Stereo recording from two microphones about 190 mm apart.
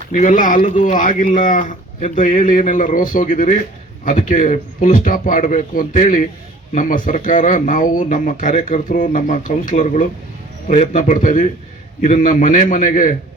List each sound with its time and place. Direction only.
0.2 s speech: 40° left (ahead or behind)